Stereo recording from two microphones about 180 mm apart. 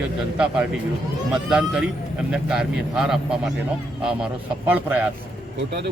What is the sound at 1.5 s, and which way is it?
Speech, 5° right (ahead or behind).